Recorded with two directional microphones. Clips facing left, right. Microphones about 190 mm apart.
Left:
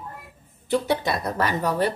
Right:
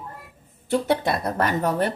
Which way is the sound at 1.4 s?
50° right (ahead or behind).